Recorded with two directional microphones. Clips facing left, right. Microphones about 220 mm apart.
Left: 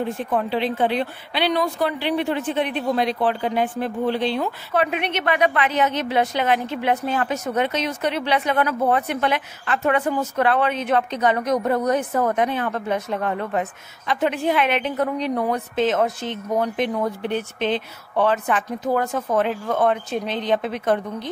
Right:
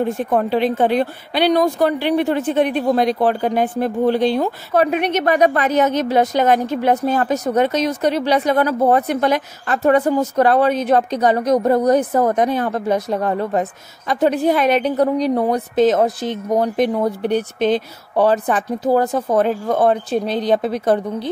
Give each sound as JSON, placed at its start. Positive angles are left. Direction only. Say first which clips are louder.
{"t": 0.0, "sound": "speech", "louder": "right 5 dB", "side_deg": -45}